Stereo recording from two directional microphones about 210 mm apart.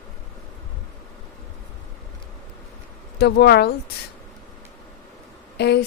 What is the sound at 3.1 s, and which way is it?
Speech, 50° left (ahead or behind).